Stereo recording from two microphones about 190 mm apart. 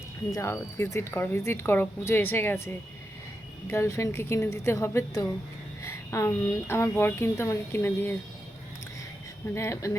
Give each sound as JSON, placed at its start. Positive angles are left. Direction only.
{"t": 0.3, "sound": "a woman's voice", "side_deg": 15}
{"t": 9.6, "sound": "a woman's voice", "side_deg": 15}